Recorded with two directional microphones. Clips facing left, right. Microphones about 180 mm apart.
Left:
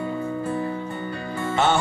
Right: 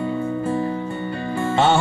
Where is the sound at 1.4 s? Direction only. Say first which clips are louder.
Right 3 dB; 30° right (ahead or behind).